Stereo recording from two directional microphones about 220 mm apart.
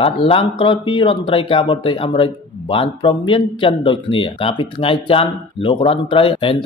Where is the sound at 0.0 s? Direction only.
25° left (ahead or behind).